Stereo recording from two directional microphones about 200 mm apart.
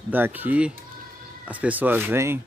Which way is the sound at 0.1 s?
10° right (ahead or behind).